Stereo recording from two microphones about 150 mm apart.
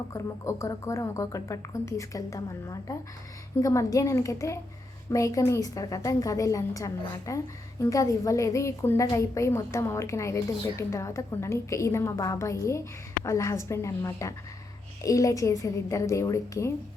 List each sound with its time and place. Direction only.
0.1 s a woman's voice: 20° left (ahead or behind)